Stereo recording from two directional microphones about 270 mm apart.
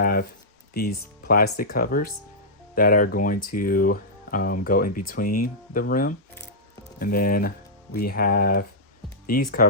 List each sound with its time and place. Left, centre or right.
0.0 s speech: left